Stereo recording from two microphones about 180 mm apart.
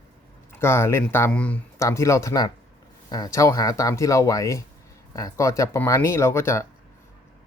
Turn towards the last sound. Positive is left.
turn(degrees=15)  # may be behind; listen again after turning